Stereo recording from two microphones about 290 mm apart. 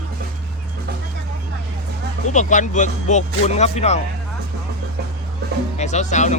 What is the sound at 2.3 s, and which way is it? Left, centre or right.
Speech, left.